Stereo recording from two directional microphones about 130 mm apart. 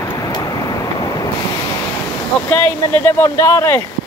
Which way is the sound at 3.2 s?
20° left (ahead or behind).